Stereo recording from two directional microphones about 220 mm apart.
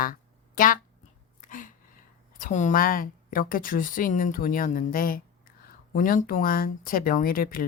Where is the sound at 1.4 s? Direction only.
40° left (ahead or behind).